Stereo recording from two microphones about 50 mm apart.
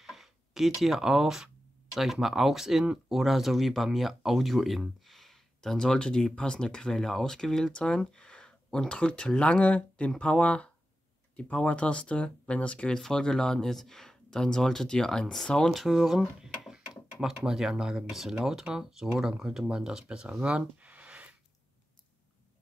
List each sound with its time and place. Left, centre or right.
0.0 s speech: centre; by 12.9 s left
12.9 s speech: centre
15.7 s speech: centre
16.7 s a sound: centre
17.5 s speech: centre
20.5 s a sound: right